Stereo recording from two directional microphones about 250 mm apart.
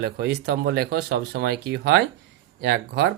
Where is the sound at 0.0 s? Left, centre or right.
Right.